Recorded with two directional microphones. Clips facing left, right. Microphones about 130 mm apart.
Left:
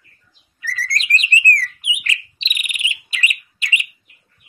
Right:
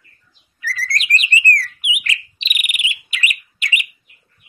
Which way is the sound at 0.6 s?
30° left (ahead or behind).